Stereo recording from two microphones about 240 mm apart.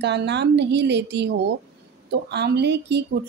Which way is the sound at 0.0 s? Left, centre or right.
Right.